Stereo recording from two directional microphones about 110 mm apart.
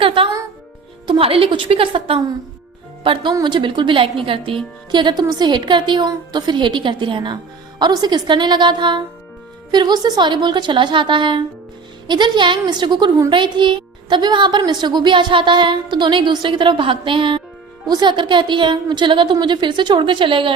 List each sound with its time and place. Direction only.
0.0 s music: 55° right (ahead or behind)
1.0 s a woman's voice: 50° right (ahead or behind)